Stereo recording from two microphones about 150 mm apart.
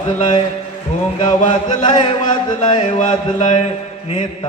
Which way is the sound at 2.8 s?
55° left (ahead or behind).